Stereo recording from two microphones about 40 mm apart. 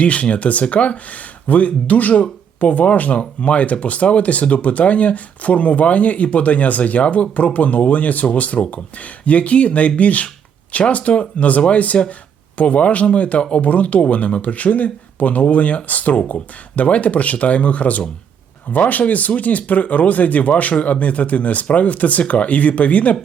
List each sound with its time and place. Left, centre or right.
0.0 s speech: left